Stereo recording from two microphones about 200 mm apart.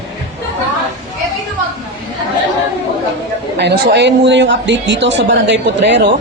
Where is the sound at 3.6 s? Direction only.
55° right (ahead or behind).